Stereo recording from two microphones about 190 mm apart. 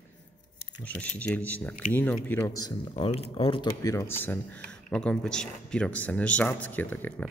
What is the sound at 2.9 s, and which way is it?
Speech, 30° left (ahead or behind).